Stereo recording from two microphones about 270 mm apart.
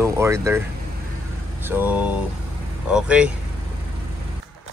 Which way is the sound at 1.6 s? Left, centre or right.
Centre.